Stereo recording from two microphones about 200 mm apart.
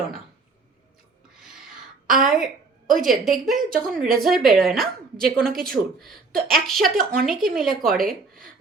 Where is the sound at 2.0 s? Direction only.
Centre (ahead or behind).